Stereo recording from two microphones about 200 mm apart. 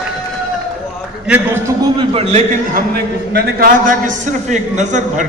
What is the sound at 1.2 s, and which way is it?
Speech, 5° right (ahead or behind).